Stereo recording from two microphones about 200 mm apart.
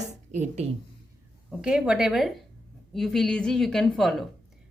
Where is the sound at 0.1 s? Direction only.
35° right (ahead or behind).